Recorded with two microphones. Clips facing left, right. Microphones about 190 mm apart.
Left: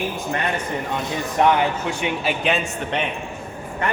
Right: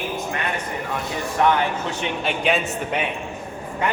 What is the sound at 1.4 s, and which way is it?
Speech, 20° left (ahead or behind).